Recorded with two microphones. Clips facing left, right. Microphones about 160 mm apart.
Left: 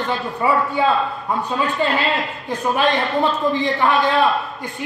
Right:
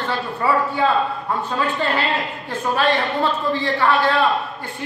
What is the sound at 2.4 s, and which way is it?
A man's voice, 15° left (ahead or behind).